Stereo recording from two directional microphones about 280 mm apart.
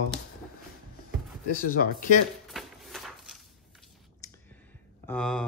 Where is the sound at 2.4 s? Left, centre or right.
Centre.